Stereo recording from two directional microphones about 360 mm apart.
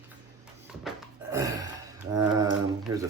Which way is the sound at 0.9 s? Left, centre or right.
Centre.